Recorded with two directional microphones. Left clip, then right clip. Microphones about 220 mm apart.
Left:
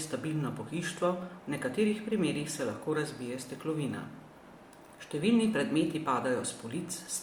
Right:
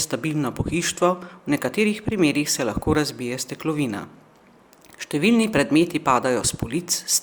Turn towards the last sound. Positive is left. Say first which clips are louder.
# right 13 dB
turn(degrees=-55)  # may be behind; listen again after turning